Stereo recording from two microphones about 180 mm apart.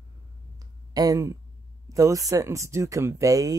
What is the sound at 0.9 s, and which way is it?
Speech, 20° right (ahead or behind).